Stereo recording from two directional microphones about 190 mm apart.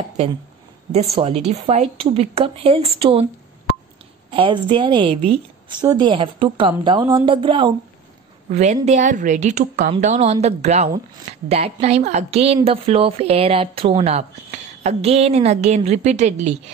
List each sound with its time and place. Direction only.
1.2 s a woman's voice: 35° right (ahead or behind)
4.3 s a woman's voice: 25° right (ahead or behind)
8.5 s a woman's voice: 40° right (ahead or behind)